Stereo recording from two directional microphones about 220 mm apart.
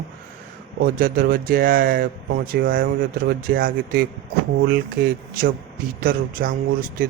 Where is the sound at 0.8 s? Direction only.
40° right (ahead or behind).